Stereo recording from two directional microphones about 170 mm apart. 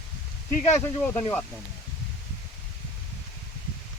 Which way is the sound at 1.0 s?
10° left (ahead or behind).